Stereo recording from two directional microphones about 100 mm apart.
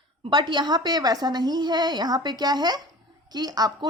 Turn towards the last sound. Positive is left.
turn(degrees=-40)  # may be behind; listen again after turning